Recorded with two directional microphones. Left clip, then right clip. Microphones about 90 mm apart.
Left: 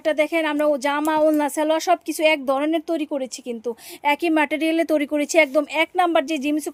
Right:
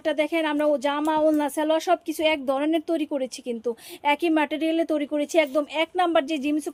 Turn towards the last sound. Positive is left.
turn(degrees=50)  # may be behind; listen again after turning